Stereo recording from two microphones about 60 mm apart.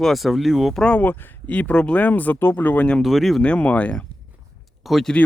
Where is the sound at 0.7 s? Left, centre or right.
Centre.